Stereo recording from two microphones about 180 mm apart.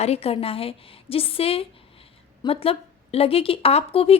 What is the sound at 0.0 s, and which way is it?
Speech, 35° left (ahead or behind).